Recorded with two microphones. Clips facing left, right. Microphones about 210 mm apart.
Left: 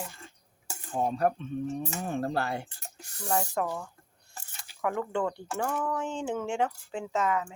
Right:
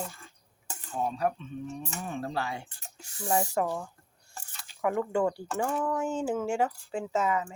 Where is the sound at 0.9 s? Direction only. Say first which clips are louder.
Left 3 dB; 45° left (ahead or behind).